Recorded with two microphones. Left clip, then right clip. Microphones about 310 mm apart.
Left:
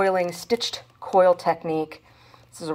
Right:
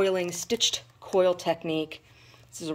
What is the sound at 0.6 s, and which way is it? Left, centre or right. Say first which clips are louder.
Speech: right 3 dB; centre.